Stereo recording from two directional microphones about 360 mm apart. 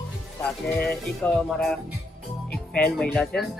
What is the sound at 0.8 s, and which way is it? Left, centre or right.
Speech, centre.